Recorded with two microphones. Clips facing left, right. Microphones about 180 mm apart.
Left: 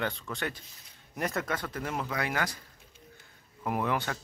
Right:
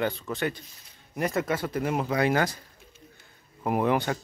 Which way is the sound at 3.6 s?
25° right (ahead or behind).